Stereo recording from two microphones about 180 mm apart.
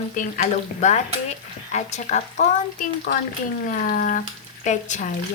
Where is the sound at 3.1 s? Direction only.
50° left (ahead or behind).